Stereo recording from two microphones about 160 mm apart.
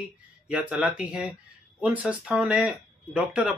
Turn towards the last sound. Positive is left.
turn(degrees=-5)  # may be behind; listen again after turning